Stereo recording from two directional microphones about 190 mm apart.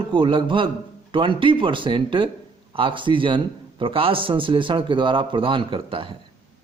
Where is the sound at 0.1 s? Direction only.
25° right (ahead or behind).